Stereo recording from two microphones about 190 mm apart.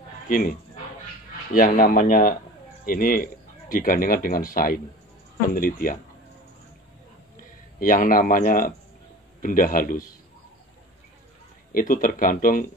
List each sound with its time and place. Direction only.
0.3 s speech: 45° left (ahead or behind)
7.8 s speech: 45° left (ahead or behind)
11.7 s speech: 45° left (ahead or behind)